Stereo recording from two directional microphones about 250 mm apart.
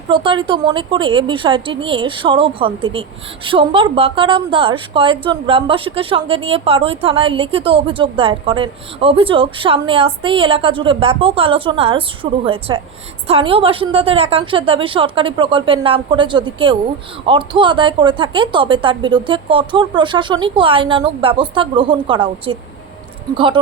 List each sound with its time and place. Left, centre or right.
0.1 s a woman's voice: right